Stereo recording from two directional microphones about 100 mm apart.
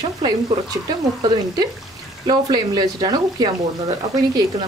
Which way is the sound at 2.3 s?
40° right (ahead or behind).